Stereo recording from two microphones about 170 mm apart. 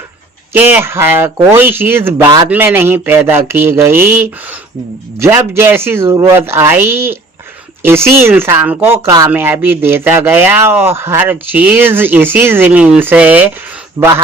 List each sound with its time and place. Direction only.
0.5 s speech: 10° right (ahead or behind)
14.0 s a man's voice: 25° right (ahead or behind)